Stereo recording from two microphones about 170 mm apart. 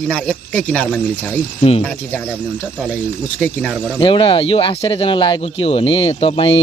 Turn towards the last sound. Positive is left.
turn(degrees=35)  # may be behind; listen again after turning